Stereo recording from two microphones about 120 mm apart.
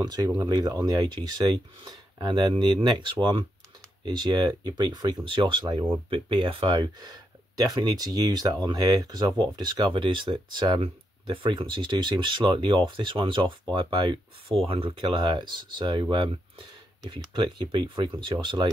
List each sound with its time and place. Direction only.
0.0 s speech: 30° right (ahead or behind)
14.7 s speech: 50° right (ahead or behind)
15.0 s speech: 40° right (ahead or behind)